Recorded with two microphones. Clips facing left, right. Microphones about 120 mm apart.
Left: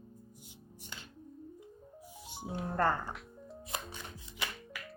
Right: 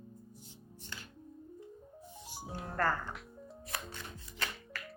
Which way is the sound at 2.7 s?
25° left (ahead or behind).